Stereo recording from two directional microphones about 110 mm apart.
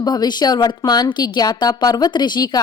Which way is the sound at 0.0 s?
40° left (ahead or behind).